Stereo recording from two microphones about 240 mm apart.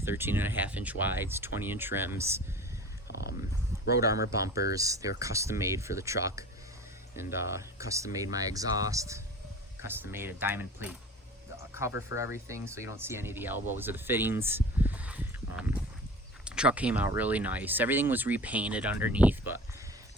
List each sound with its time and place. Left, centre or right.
0.0 s speech: centre
3.1 s a sound: left
4.7 s speech: centre
11.5 s music: centre
12.0 s speech: centre